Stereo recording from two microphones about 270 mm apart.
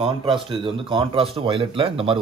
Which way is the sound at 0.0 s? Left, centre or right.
Centre.